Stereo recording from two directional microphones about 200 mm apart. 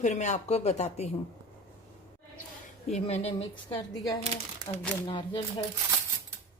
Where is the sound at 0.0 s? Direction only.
35° left (ahead or behind).